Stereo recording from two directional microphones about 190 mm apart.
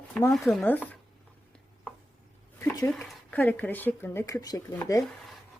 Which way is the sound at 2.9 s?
5° left (ahead or behind).